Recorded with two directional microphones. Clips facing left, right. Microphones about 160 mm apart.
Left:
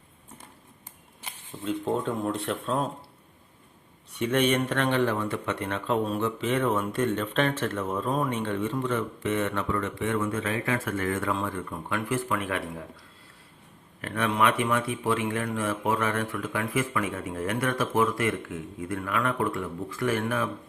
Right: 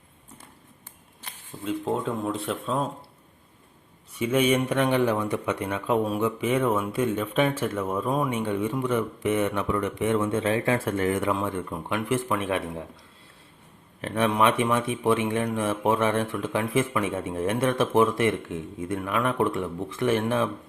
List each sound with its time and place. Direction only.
1.6 s speech: centre (ahead or behind)
4.1 s speech: 5° right (ahead or behind); by 12.8 s 20° right (ahead or behind)
14.0 s speech: 25° right (ahead or behind)